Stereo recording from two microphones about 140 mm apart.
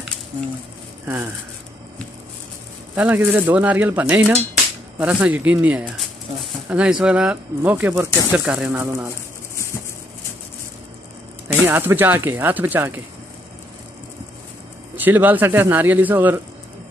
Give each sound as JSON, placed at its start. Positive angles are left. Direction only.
{"t": 1.0, "sound": "speech", "side_deg": -20}
{"t": 2.9, "sound": "speech", "side_deg": -10}
{"t": 11.4, "sound": "speech", "side_deg": -15}
{"t": 15.0, "sound": "speech", "side_deg": -15}